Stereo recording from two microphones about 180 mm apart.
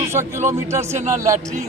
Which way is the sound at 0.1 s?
15° right (ahead or behind).